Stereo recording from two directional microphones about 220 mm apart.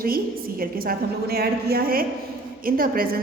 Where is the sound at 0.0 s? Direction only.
40° right (ahead or behind).